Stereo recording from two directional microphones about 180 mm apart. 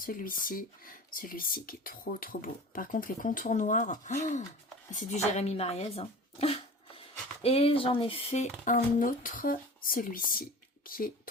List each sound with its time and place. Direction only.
0.0 s speech: 50° left (ahead or behind)